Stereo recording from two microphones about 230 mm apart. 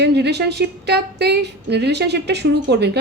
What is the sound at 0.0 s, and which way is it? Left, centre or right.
A woman's voice, right.